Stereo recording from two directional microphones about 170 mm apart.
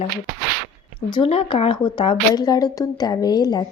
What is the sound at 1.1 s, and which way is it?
A woman's voice, 35° left (ahead or behind).